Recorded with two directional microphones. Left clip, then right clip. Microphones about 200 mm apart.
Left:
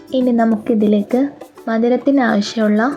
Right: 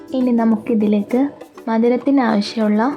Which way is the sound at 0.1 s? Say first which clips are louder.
Left 2 dB; 10° left (ahead or behind).